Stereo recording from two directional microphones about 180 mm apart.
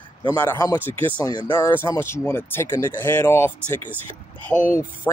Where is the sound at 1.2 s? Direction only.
25° left (ahead or behind).